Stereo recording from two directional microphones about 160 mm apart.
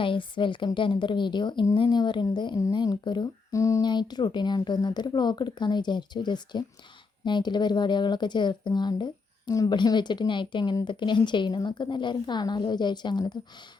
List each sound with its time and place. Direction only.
0.0 s a woman's voice: 30° left (ahead or behind)